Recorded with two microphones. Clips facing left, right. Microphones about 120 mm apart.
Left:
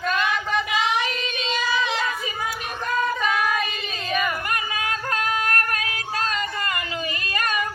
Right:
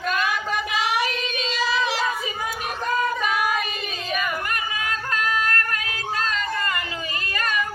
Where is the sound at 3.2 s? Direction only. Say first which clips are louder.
Even; 10° right (ahead or behind).